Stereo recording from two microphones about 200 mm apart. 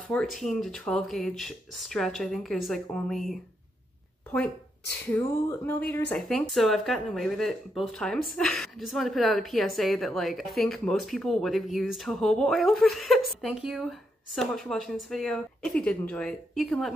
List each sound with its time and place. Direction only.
0.1 s speech: centre (ahead or behind)
5.1 s speech: 10° left (ahead or behind)